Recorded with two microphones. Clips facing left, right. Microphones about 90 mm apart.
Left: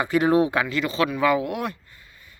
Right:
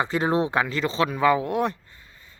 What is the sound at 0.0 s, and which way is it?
Speech, 25° right (ahead or behind).